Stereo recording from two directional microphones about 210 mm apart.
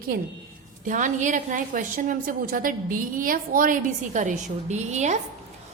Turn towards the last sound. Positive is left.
turn(degrees=-35)  # may be behind; listen again after turning